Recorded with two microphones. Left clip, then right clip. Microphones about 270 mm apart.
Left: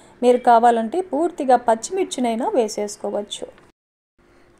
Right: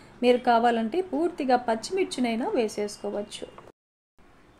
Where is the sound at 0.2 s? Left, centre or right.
Left.